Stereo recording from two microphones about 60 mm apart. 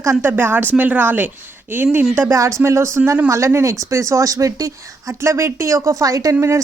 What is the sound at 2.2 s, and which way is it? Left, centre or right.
Speech, right.